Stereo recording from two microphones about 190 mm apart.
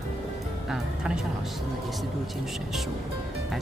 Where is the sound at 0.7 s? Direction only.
5° right (ahead or behind).